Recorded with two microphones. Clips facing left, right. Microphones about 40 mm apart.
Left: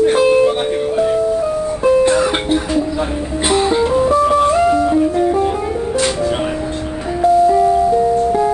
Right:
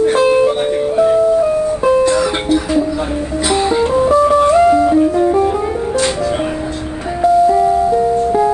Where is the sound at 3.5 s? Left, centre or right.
Centre.